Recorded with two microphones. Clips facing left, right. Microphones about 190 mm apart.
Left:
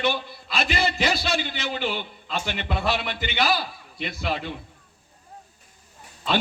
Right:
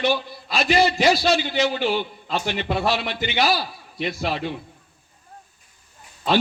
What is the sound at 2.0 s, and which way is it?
Speech, 45° right (ahead or behind).